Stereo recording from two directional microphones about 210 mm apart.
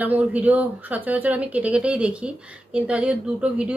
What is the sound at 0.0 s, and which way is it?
Speech, 5° right (ahead or behind).